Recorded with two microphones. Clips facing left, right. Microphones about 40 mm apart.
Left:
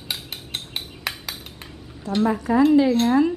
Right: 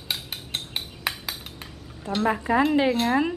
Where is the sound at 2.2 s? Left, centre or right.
Right.